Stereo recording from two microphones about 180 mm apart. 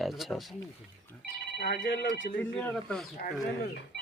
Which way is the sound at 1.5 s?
60° left (ahead or behind).